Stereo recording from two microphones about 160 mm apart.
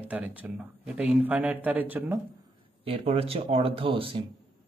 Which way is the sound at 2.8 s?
35° right (ahead or behind).